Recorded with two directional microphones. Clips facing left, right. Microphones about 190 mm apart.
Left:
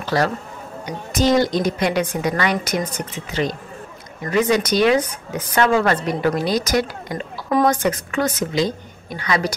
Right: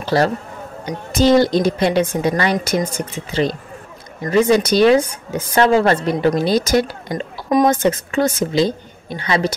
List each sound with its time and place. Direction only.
0.0 s a woman's voice: 30° right (ahead or behind)